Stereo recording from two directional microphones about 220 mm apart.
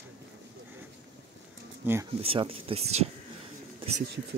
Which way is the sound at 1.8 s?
10° right (ahead or behind).